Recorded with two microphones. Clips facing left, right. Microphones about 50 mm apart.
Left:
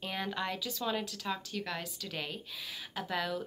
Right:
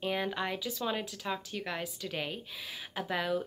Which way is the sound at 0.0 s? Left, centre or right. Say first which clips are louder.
Right 3 dB; centre.